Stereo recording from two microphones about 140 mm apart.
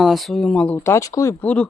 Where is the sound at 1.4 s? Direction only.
10° left (ahead or behind).